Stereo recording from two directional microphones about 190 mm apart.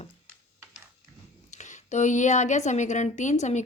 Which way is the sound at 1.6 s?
40° left (ahead or behind).